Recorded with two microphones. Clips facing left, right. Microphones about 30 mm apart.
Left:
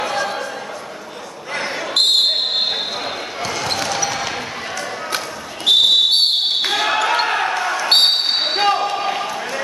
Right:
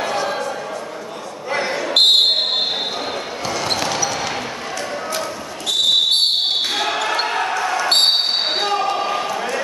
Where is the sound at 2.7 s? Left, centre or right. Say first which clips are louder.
Even; centre.